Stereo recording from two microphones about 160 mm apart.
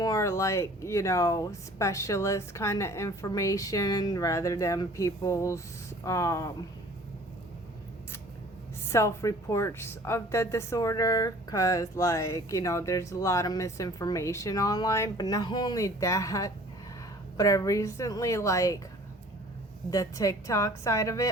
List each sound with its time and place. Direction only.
0.0 s speech: 20° left (ahead or behind)
8.9 s speech: 15° left (ahead or behind)
19.9 s speech: 20° left (ahead or behind)